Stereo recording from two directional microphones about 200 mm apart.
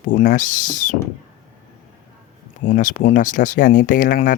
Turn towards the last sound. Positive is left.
turn(degrees=45)  # may be behind; listen again after turning